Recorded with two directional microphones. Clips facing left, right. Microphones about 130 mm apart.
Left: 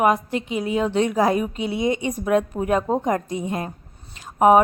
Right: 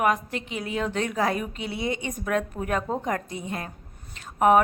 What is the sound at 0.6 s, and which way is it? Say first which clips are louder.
A woman's voice: left 7 dB; 35° left (ahead or behind).